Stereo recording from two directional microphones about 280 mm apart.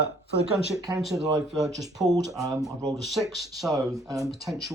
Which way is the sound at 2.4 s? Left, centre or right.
Centre.